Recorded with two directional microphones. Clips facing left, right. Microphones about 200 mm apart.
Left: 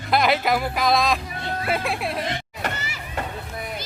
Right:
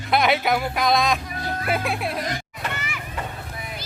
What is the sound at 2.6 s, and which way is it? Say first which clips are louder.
Children playing: left 1 dB; 35° left (ahead or behind).